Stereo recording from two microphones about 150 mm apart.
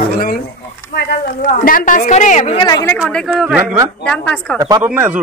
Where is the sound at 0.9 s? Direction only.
80° left; by 2.6 s 50° left (ahead or behind).